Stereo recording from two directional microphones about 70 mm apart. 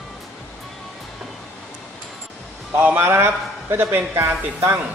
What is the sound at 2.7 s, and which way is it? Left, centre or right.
Speech, right.